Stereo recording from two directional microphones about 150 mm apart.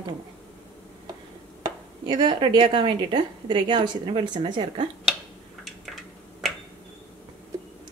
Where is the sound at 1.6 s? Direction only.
30° right (ahead or behind).